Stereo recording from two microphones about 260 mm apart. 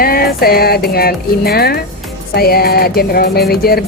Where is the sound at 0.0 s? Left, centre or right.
Left.